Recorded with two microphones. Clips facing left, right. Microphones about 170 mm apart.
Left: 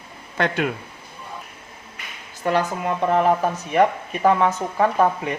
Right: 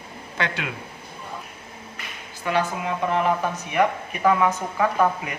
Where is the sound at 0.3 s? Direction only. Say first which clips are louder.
Left 6 dB; 50° left (ahead or behind).